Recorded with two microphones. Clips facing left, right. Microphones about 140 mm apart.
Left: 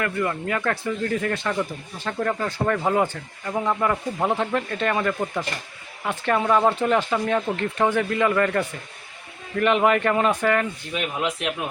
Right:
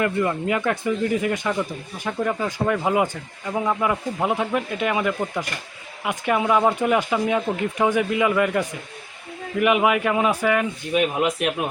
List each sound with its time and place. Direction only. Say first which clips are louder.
0.0 s speech: right 3 dB; 20° right (ahead or behind)